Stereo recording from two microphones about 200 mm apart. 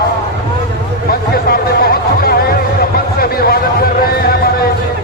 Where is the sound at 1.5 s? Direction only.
50° left (ahead or behind).